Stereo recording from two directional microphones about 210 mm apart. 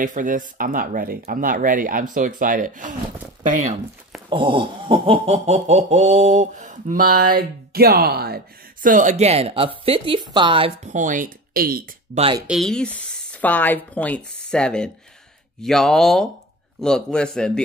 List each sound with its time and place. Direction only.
0.0 s speech: 40° right (ahead or behind)
4.3 s speech: 25° right (ahead or behind); by 8.4 s 50° right (ahead or behind)
8.8 s speech: 35° right (ahead or behind)
12.2 s speech: 25° right (ahead or behind)
12.4 s a man's voice: centre (ahead or behind)